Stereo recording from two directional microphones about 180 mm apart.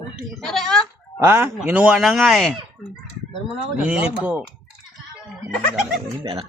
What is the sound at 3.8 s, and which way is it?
Speech, 5° right (ahead or behind).